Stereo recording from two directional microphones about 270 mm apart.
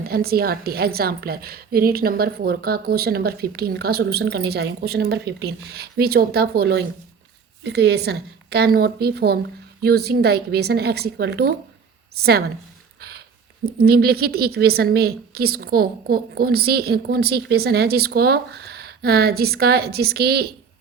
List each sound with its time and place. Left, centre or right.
0.0 s a woman's voice: right
13.7 s a woman's voice: right